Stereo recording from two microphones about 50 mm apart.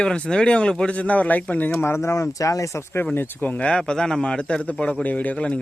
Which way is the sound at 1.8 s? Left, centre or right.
Left.